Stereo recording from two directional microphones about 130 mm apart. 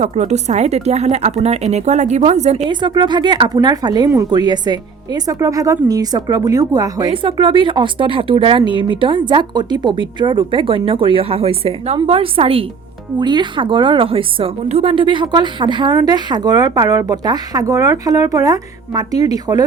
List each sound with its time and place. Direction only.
0.0 s a woman's voice: 60° right (ahead or behind)
2.6 s a woman's voice: 35° right (ahead or behind)
7.1 s a woman's voice: 40° right (ahead or behind)
13.1 s a woman's voice: 35° right (ahead or behind)